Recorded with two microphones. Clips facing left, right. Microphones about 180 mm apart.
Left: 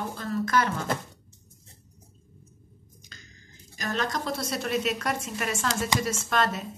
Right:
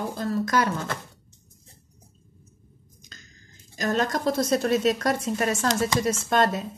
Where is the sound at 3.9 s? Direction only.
45° right (ahead or behind).